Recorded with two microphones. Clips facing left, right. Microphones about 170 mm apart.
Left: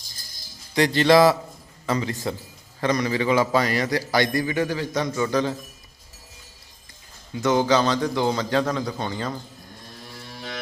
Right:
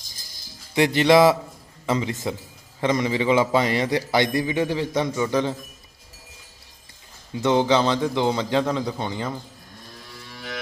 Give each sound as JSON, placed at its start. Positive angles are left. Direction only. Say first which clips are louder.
{"t": 0.7, "sound": "a man's voice", "louder": "even", "side_deg": -20}
{"t": 7.4, "sound": "a man's voice", "louder": "right 1 dB", "side_deg": -25}